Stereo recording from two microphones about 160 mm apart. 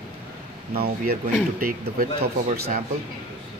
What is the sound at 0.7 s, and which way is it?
Speech, 70° right (ahead or behind).